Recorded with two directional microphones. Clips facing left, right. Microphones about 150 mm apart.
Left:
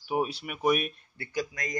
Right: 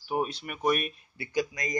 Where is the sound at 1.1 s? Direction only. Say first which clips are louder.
Right 3 dB; 15° right (ahead or behind).